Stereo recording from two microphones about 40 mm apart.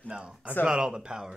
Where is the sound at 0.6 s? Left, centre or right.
Right.